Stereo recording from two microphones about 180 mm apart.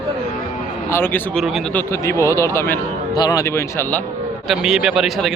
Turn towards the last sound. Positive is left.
turn(degrees=0)  # may be behind; listen again after turning